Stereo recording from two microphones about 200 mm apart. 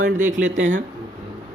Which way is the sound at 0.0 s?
40° right (ahead or behind).